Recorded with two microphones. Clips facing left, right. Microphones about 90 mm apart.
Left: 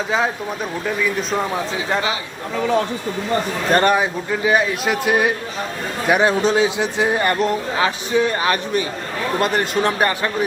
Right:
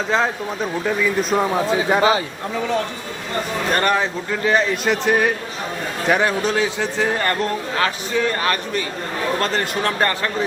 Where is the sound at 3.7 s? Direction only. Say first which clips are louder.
Left 4 dB; 20° left (ahead or behind).